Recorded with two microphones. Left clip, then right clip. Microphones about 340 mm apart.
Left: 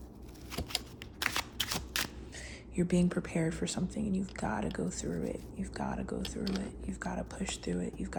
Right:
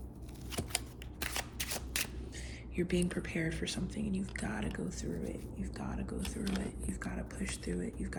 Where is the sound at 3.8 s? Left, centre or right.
Centre.